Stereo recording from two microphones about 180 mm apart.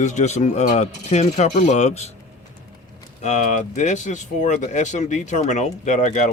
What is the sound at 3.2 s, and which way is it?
Speech, 40° left (ahead or behind).